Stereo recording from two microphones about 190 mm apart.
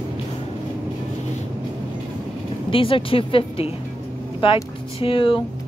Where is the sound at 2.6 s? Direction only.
30° left (ahead or behind).